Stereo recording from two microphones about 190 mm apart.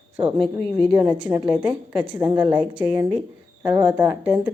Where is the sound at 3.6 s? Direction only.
20° right (ahead or behind).